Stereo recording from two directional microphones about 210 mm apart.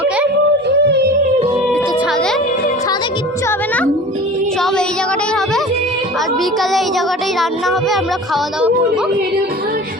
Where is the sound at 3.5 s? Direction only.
10° left (ahead or behind).